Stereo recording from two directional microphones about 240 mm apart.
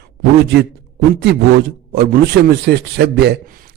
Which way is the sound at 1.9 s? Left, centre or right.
Right.